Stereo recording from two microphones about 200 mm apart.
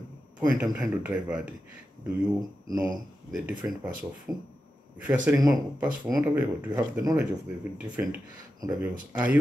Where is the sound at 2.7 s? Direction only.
20° right (ahead or behind).